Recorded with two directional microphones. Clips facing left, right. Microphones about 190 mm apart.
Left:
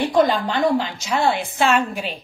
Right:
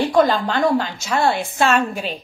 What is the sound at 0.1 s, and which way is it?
A woman's voice, 15° left (ahead or behind).